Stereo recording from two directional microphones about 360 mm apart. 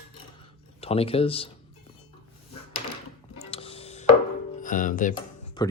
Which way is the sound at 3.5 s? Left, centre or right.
Centre.